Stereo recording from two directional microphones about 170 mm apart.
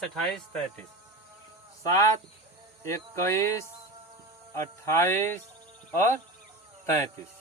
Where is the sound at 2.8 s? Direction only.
15° left (ahead or behind).